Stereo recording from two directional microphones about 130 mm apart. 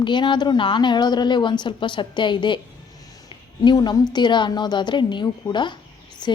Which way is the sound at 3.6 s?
35° left (ahead or behind).